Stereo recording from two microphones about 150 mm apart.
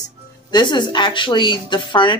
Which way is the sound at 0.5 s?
30° left (ahead or behind).